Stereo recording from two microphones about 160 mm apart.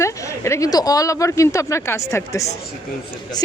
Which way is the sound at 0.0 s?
20° left (ahead or behind).